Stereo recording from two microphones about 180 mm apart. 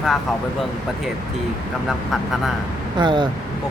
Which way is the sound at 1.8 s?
Centre (ahead or behind).